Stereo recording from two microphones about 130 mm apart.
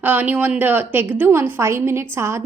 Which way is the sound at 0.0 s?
15° right (ahead or behind).